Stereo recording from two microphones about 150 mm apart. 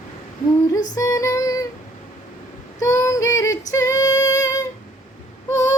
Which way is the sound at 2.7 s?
20° left (ahead or behind).